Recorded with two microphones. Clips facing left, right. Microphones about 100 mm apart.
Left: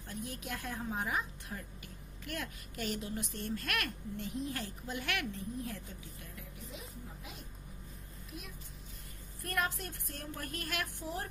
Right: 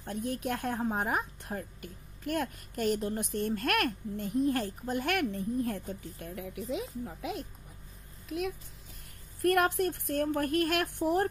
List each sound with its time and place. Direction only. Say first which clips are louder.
0.0 s a woman's voice: right 9 dB; 55° right (ahead or behind); by 7.4 s 90° right
9.4 s speech: right 11 dB; 60° right (ahead or behind)